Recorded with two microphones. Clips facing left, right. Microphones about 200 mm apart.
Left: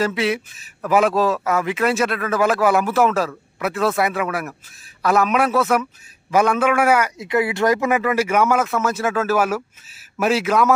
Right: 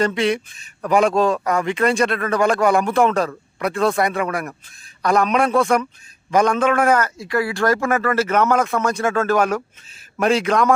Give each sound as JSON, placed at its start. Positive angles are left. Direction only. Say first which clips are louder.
{"t": 0.0, "sound": "a man's voice", "louder": "right 2 dB", "side_deg": 5}
{"t": 7.2, "sound": "a man's voice", "louder": "left 1 dB", "side_deg": 20}